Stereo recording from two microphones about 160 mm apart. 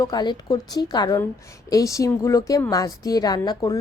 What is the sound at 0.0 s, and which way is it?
A woman's voice, 25° left (ahead or behind).